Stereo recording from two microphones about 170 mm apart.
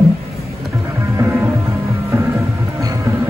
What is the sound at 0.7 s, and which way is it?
Music, 15° right (ahead or behind).